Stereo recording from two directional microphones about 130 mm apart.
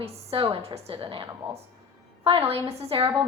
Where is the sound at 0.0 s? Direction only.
50° right (ahead or behind).